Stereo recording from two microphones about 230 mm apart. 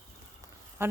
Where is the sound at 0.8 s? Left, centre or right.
Centre.